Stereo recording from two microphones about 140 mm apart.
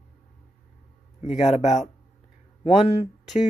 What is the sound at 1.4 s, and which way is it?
Speech, 55° left (ahead or behind).